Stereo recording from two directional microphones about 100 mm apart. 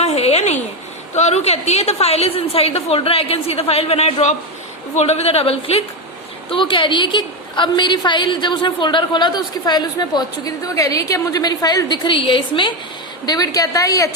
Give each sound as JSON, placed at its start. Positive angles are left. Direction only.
{"t": 0.0, "sound": "a sound", "side_deg": 90}
{"t": 1.3, "sound": "a woman's voice", "side_deg": 90}
{"t": 6.5, "sound": "a woman's voice", "side_deg": 55}
{"t": 12.0, "sound": "a woman's voice", "side_deg": 60}
{"t": 13.2, "sound": "a woman's voice", "side_deg": 40}